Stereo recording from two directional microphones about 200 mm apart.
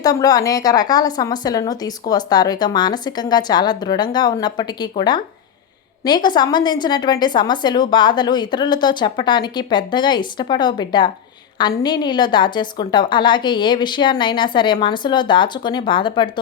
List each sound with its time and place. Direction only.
0.0 s a woman's voice: 20° left (ahead or behind)